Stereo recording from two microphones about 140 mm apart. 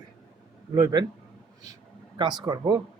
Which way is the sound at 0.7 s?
25° right (ahead or behind).